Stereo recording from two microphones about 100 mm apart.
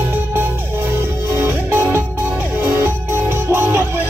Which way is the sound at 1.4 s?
25° right (ahead or behind).